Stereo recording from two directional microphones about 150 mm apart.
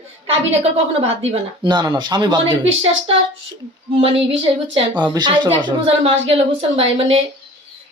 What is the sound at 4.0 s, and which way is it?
Speech, 40° right (ahead or behind).